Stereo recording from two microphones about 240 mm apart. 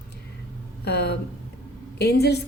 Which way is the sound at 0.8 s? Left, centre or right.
Left.